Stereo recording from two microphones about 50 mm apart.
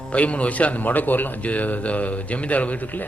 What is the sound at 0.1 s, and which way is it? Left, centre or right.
A man's voice, left.